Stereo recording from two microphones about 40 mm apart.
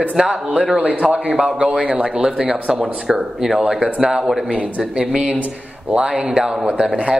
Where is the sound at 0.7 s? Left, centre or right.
Right.